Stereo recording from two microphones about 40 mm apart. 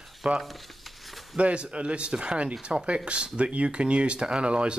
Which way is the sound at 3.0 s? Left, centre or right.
Right.